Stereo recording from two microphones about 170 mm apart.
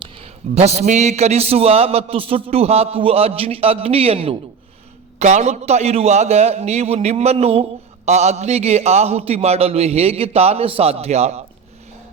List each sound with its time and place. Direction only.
0.0 s a man's voice: 35° right (ahead or behind)